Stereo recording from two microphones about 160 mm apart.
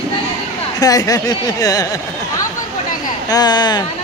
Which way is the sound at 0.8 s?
25° left (ahead or behind).